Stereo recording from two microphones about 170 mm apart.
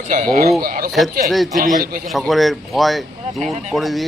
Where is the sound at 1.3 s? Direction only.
Centre (ahead or behind).